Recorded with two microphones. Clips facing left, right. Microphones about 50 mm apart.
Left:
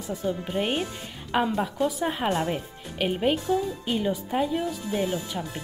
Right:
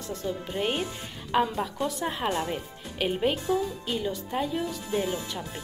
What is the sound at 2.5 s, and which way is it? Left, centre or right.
Speech, centre.